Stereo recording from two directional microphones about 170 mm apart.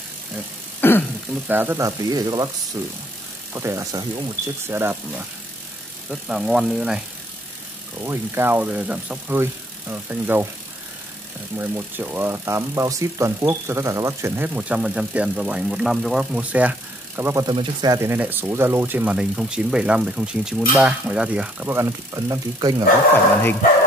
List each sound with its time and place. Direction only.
0.7 s a sound: 10° left (ahead or behind)
1.5 s speech: 10° right (ahead or behind)
3.5 s speech: 15° right (ahead or behind)
8.0 s speech: 15° right (ahead or behind)
11.5 s speech: 10° right (ahead or behind)